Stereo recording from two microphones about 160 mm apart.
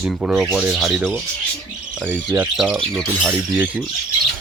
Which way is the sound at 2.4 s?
5° right (ahead or behind).